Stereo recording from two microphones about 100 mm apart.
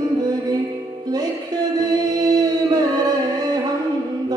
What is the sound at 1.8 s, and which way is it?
Singing, 40° right (ahead or behind).